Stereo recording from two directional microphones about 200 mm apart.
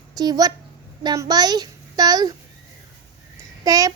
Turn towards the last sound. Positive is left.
turn(degrees=-15)  # may be behind; listen again after turning